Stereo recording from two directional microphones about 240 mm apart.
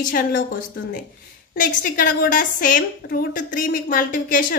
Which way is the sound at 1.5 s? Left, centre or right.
Left.